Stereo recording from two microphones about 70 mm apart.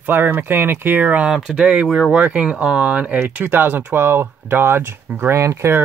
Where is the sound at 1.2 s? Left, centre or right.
Centre; by 5.9 s right.